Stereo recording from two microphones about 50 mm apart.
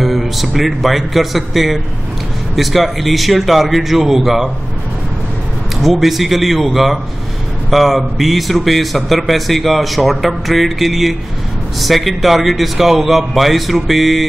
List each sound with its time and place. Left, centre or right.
0.0 s speech: centre
5.8 s speech: centre